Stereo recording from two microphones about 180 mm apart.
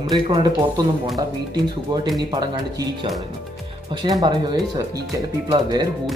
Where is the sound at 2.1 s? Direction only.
20° right (ahead or behind).